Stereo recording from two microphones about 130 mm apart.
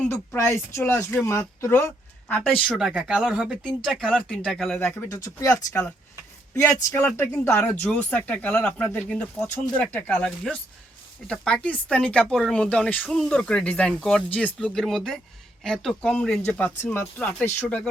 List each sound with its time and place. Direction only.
0.1 s speech: 20° left (ahead or behind)
2.6 s speech: 5° right (ahead or behind)
4.9 s speech: 25° left (ahead or behind)